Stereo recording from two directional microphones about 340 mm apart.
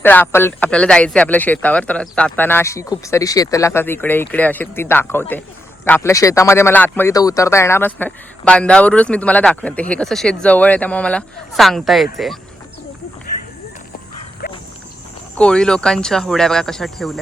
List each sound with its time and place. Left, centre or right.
0.0 s a man's voice: centre
14.4 s dog: left
15.4 s a man's voice: centre